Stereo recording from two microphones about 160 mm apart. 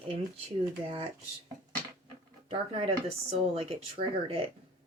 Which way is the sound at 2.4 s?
35° right (ahead or behind).